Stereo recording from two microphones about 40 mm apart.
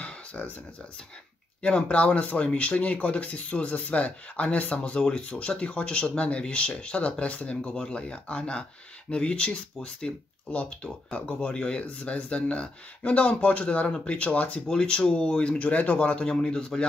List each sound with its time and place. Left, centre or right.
0.0 s a sound: left
1.6 s speech: left
10.5 s speech: left
11.5 s speech: left
14.7 s speech: left
15.5 s speech: left; by 16.8 s centre